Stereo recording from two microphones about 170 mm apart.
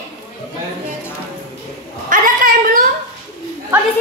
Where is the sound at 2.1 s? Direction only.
55° right (ahead or behind).